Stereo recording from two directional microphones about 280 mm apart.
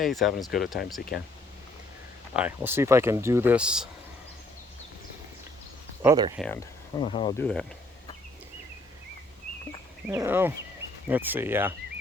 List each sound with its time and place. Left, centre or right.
0.0 s speech: centre
1.1 s speech: left
2.3 s speech: centre
6.0 s speech: centre
6.4 s speech: centre
7.3 s speech: centre
10.1 s speech: centre